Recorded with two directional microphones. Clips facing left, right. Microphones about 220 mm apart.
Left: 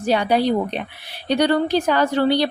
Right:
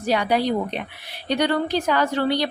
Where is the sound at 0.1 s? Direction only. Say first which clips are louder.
Left 3 dB; 30° left (ahead or behind).